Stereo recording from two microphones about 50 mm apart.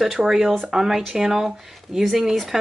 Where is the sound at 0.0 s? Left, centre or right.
Centre.